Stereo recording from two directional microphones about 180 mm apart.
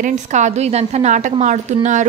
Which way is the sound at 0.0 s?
40° right (ahead or behind).